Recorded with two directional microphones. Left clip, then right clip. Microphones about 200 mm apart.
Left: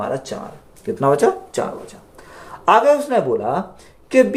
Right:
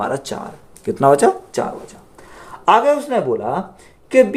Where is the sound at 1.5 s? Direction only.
25° right (ahead or behind).